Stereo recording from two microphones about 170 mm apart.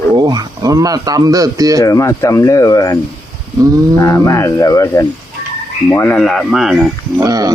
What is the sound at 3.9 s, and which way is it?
Speech, 15° left (ahead or behind).